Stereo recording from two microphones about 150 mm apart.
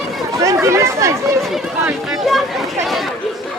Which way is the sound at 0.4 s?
20° right (ahead or behind).